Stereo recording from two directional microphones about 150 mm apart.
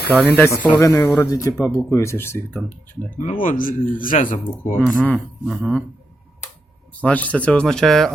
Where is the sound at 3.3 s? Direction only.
65° left (ahead or behind).